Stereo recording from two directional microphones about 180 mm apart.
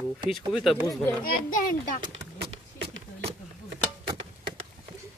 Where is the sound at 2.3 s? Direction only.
65° right (ahead or behind).